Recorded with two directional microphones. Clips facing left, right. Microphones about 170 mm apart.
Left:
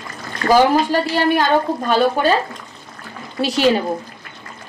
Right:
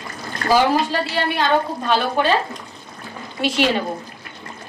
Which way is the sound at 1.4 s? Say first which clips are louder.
Left 3 dB; 45° left (ahead or behind).